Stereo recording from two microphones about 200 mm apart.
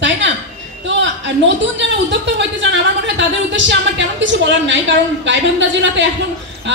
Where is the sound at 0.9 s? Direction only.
65° right (ahead or behind).